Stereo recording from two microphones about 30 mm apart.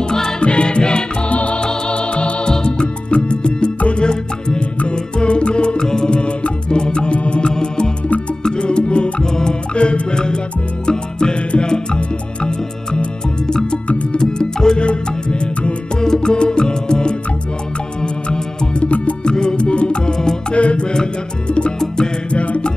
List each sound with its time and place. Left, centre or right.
0.4 s music: left
1.3 s music: left
1.6 s music: left
9.2 s music: left
9.8 s music: left
14.8 s music: left
16.0 s music: left
18.9 s music: left
19.2 s music: left
20.1 s music: left
20.5 s music: left
21.7 s music: left
22.3 s music: left